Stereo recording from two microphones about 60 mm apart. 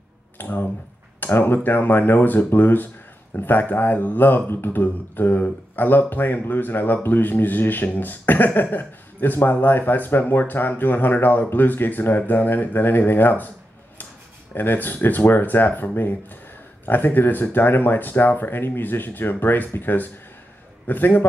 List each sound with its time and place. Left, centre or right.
0.4 s a sound: left
1.2 s speech: left
14.5 s speech: left